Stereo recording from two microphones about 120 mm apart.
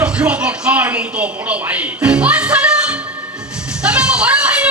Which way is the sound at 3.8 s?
10° right (ahead or behind).